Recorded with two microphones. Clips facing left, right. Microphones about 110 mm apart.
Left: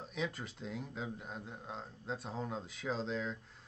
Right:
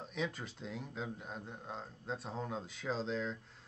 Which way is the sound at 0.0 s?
Centre (ahead or behind).